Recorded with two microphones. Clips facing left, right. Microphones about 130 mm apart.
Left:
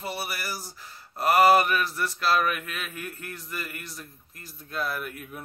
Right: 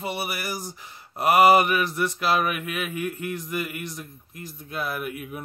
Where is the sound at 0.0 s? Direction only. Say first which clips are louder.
Right 3 dB; 15° right (ahead or behind).